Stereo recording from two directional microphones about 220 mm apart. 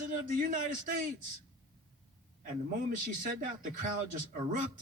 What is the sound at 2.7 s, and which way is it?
Speech, 35° right (ahead or behind).